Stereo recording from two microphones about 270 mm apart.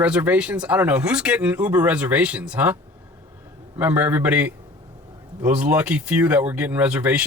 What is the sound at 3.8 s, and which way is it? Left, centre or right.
A man's voice, centre.